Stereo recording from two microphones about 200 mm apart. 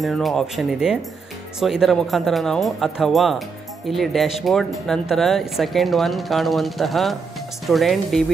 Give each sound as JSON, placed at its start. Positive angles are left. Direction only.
{"t": 0.0, "sound": "speech", "side_deg": 0}